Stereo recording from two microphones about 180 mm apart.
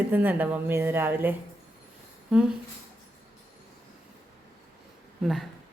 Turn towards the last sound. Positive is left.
turn(degrees=0)  # may be behind; listen again after turning